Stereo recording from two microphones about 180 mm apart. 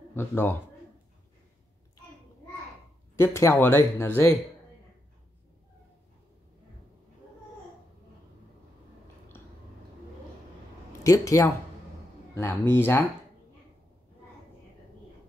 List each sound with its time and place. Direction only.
0.1 s speech: 10° left (ahead or behind)
3.2 s speech: 15° left (ahead or behind)
11.1 s speech: 20° left (ahead or behind)